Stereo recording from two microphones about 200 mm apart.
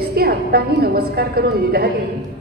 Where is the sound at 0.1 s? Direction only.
50° right (ahead or behind).